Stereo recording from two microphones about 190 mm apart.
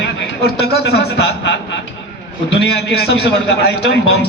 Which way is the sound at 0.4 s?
60° left (ahead or behind).